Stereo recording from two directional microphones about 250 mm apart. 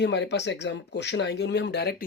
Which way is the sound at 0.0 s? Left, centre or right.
Left.